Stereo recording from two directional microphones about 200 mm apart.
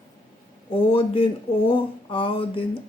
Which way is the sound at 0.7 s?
25° left (ahead or behind).